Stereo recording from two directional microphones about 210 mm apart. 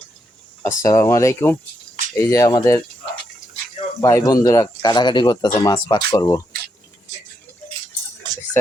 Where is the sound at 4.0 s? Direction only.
15° left (ahead or behind).